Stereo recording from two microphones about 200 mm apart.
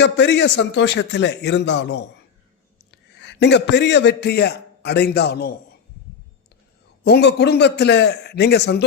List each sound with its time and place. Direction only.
0.0 s a man's voice: 60° left (ahead or behind)
7.0 s a man's voice: 55° left (ahead or behind)